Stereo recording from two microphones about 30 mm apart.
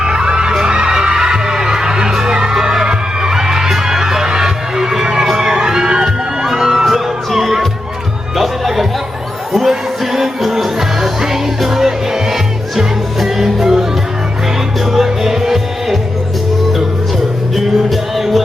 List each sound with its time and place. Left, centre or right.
0.0 s a sound: right
0.6 s heart sounds: right
2.8 s crowd: right
4.3 s music: centre
5.4 s crowd: centre
5.8 s crowd: right
6.4 s music: centre
8.4 s music: centre
14.8 s music: centre
17.8 s music: centre